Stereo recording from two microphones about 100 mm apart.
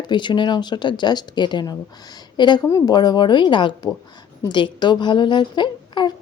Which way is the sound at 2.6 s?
35° left (ahead or behind).